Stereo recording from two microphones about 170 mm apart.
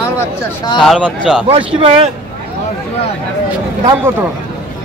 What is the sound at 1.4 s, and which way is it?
Speech, 35° right (ahead or behind).